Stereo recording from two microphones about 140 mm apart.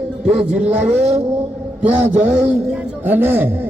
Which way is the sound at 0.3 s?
10° right (ahead or behind).